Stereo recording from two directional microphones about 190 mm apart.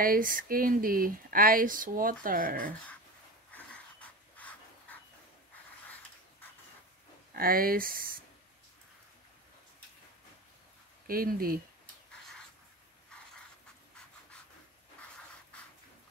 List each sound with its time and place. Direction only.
0.0 s speech: 45° right (ahead or behind)
3.5 s pant: 10° left (ahead or behind)
7.3 s speech: 50° right (ahead or behind)
11.1 s speech: 50° right (ahead or behind)
11.8 s a sound: 5° left (ahead or behind)